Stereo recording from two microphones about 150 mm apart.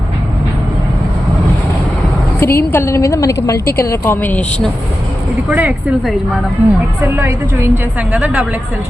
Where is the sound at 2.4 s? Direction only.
15° left (ahead or behind).